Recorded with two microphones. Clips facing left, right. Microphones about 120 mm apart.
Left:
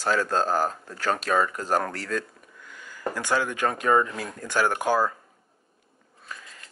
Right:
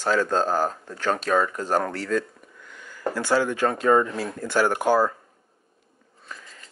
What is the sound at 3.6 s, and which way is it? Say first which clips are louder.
Speech: right 1 dB; 10° left (ahead or behind).